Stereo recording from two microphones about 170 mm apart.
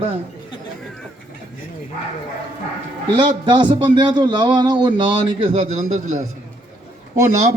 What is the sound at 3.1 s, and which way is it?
A man's voice, 30° right (ahead or behind).